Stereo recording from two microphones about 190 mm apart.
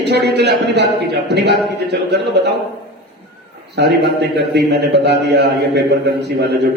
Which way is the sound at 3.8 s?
60° right (ahead or behind).